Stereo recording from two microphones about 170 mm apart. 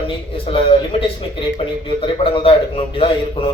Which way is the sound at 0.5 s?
30° left (ahead or behind).